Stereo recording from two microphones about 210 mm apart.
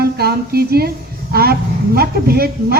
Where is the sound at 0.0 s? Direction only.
50° right (ahead or behind).